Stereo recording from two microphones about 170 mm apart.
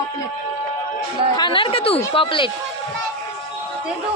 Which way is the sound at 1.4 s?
30° left (ahead or behind).